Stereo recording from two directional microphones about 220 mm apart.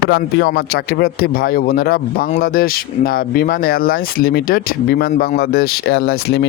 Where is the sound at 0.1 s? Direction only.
50° left (ahead or behind).